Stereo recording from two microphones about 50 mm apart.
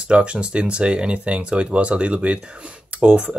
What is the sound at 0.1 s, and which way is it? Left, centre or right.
Speech, right.